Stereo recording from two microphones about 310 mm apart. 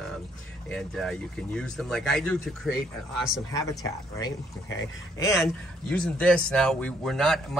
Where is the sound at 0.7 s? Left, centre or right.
Centre.